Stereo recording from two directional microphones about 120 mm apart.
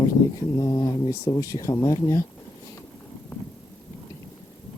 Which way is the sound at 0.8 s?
25° left (ahead or behind).